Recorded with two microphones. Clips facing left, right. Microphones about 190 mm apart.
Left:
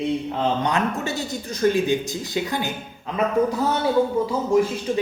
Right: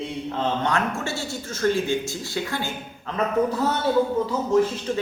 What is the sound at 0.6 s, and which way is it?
Speech, 20° left (ahead or behind).